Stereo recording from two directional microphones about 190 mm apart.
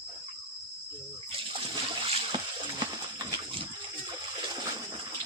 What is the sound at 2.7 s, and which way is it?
Horse, 25° right (ahead or behind).